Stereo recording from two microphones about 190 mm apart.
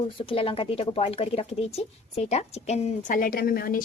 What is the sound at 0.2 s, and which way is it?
Speech, 30° left (ahead or behind).